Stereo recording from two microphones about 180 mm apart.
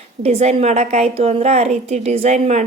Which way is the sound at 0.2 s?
35° right (ahead or behind).